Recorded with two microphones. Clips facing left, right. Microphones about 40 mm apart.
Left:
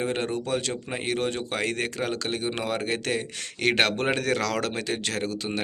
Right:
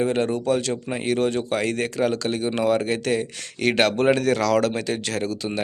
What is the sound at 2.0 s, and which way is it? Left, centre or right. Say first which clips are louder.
Speech: right 6 dB; centre.